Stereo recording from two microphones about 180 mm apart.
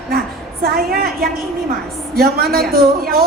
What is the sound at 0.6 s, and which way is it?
A man's voice, 55° right (ahead or behind).